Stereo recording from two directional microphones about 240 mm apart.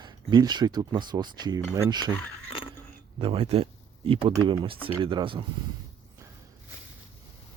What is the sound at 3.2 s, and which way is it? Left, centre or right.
Speech, right.